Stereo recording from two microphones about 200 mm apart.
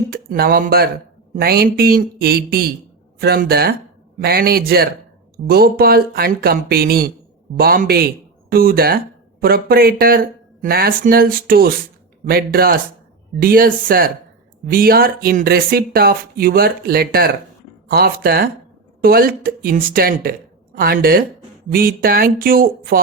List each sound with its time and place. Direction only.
0.1 s speech: 50° right (ahead or behind)